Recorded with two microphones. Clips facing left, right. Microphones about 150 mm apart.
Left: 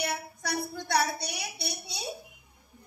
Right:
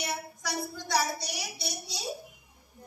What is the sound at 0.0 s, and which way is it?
A woman's voice, 55° left (ahead or behind).